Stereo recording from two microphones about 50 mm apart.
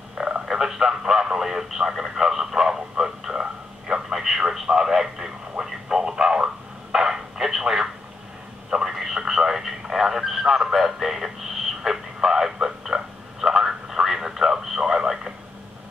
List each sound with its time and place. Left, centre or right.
0.2 s frog: centre
0.5 s radio: centre
8.6 s a sound: centre